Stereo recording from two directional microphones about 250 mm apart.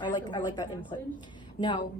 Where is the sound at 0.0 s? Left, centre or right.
Centre.